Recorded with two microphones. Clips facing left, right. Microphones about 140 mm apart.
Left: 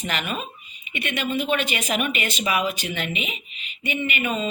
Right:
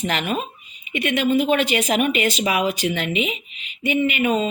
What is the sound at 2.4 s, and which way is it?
Speech, 90° right.